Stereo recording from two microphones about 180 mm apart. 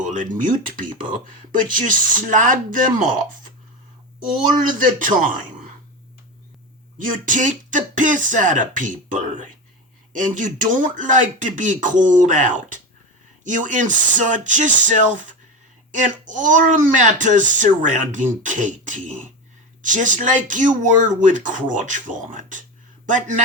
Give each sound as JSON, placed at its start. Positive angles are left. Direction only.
{"t": 0.0, "sound": "speech", "side_deg": -45}
{"t": 4.8, "sound": "a man's voice", "side_deg": -50}
{"t": 7.0, "sound": "speech", "side_deg": -45}